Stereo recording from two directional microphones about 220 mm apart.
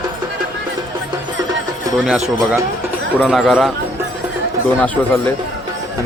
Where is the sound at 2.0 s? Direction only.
Centre (ahead or behind).